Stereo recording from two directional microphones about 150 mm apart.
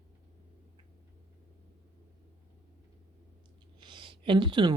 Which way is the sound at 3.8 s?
35° right (ahead or behind).